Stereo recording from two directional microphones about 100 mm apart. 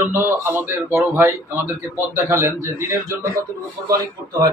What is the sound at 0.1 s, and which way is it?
A man's voice, 25° right (ahead or behind).